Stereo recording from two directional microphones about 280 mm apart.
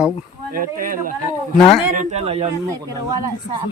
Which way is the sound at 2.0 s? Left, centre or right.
Right.